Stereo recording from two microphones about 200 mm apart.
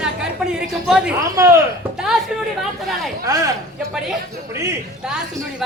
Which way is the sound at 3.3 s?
15° right (ahead or behind).